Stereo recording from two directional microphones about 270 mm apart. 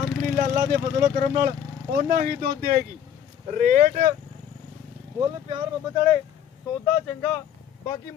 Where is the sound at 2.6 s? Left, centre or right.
Right.